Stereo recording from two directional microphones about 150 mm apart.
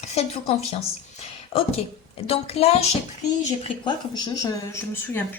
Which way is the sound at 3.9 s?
30° left (ahead or behind).